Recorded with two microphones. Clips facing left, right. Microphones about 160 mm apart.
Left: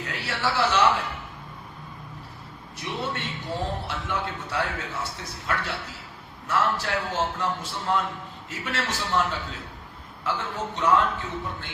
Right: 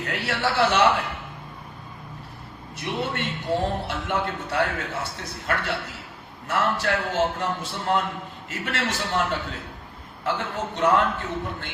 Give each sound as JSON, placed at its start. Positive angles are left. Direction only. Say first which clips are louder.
{"t": 0.0, "sound": "a man's voice", "louder": "right 3 dB", "side_deg": -60}
{"t": 2.7, "sound": "a man's voice", "louder": "right 3 dB", "side_deg": -60}